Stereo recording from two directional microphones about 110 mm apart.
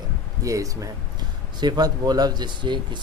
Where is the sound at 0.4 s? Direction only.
30° right (ahead or behind).